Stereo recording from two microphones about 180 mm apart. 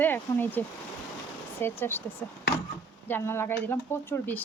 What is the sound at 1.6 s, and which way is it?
Speech, 10° left (ahead or behind).